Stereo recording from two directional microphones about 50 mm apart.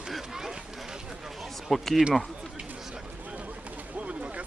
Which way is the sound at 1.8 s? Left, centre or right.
Centre.